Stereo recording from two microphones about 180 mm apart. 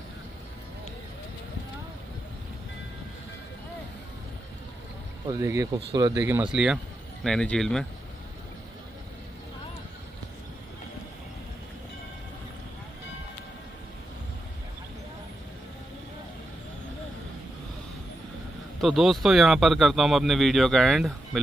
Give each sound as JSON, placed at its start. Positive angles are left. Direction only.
{"t": 5.3, "sound": "speech", "side_deg": -20}
{"t": 18.8, "sound": "speech", "side_deg": 0}